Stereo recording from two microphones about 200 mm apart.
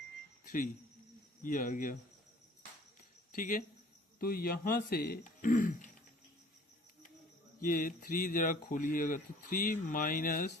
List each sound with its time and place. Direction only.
0.4 s speech: 40° left (ahead or behind)
3.3 s speech: 40° left (ahead or behind)
7.6 s speech: 45° left (ahead or behind)